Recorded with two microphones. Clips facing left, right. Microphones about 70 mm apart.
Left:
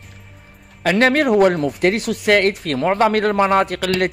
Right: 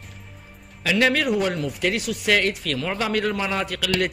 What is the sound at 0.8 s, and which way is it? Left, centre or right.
Speech, left.